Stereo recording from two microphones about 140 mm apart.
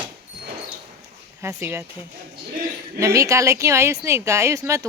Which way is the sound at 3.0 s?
20° right (ahead or behind).